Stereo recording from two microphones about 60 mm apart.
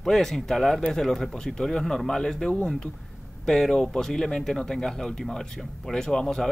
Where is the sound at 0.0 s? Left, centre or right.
Centre.